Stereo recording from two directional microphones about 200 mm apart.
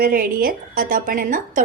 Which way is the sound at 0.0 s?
45° right (ahead or behind).